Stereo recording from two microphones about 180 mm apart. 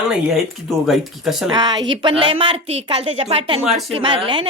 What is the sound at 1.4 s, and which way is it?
A woman's voice, 25° right (ahead or behind).